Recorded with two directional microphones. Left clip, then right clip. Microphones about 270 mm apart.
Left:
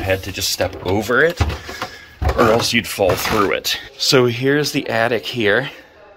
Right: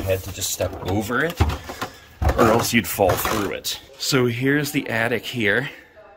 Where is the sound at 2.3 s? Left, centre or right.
Centre.